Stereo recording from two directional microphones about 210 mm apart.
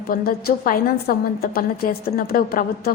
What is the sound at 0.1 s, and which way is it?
A woman's voice, 45° left (ahead or behind).